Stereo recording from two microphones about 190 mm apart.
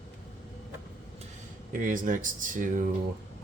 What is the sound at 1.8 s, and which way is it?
Speech, 45° right (ahead or behind).